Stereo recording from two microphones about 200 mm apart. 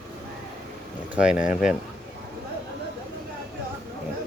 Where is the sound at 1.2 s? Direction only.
5° right (ahead or behind).